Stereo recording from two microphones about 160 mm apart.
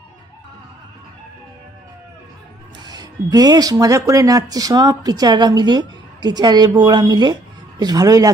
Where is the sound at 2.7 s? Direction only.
25° right (ahead or behind).